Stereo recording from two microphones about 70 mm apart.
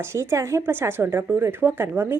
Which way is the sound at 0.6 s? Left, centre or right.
Right.